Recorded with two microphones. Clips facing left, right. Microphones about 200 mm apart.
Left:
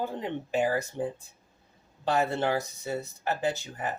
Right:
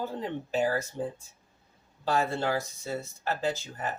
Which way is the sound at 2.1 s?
20° left (ahead or behind).